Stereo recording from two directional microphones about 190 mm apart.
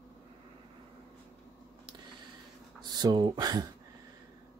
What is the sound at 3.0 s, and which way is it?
Speech, 20° right (ahead or behind).